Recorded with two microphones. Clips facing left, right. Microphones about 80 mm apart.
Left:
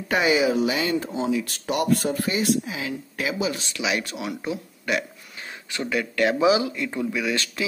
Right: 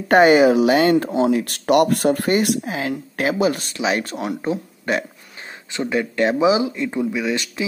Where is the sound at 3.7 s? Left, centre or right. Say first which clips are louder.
Right 5 dB; right.